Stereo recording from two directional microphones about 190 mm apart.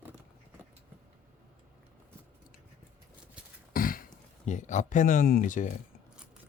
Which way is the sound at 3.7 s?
50° left (ahead or behind).